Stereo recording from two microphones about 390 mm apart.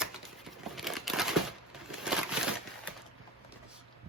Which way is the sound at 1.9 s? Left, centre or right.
Centre.